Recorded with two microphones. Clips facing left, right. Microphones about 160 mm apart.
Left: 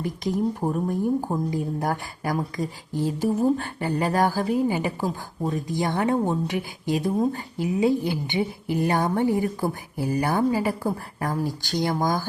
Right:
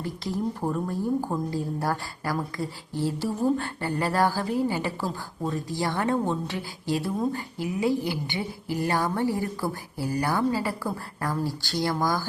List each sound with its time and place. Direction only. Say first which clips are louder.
0.0 s a woman's voice: left 4 dB; 15° left (ahead or behind)